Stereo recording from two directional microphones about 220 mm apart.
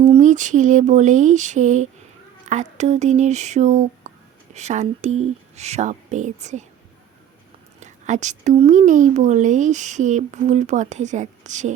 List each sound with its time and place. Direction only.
0.0 s a woman's voice: 30° right (ahead or behind)
7.8 s a woman's voice: 35° right (ahead or behind)